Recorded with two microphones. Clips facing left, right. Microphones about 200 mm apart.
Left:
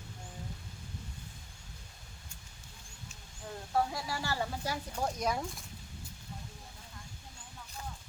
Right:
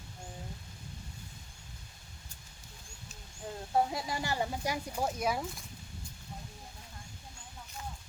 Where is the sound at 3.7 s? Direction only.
20° right (ahead or behind); by 5.6 s 5° right (ahead or behind).